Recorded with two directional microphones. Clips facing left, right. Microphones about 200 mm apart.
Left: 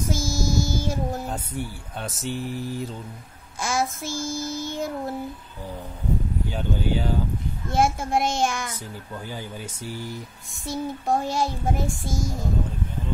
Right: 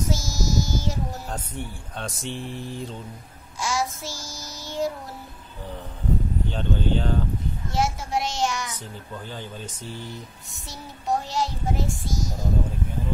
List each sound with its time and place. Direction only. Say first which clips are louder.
0.0 s music: left 2 dB; 50° left (ahead or behind)
1.2 s speech: left 3 dB; 10° left (ahead or behind)
3.5 s music: left 1 dB; 55° left (ahead or behind)
6.4 s speech: right 1 dB; 10° left (ahead or behind)
7.7 s music: left 4 dB; 55° left (ahead or behind)
9.3 s speech: left 1 dB; 10° left (ahead or behind)
10.5 s music: left 14 dB; 50° left (ahead or behind)